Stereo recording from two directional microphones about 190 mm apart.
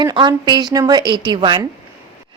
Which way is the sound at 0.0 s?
25° right (ahead or behind).